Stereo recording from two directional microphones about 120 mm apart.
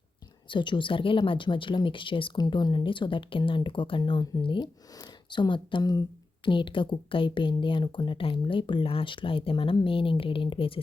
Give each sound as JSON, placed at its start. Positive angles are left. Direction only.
{"t": 0.4, "sound": "speech", "side_deg": 40}